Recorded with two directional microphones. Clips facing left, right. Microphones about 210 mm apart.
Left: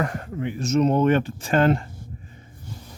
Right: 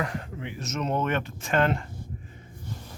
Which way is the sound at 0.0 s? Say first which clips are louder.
Left 5 dB; 45° left (ahead or behind).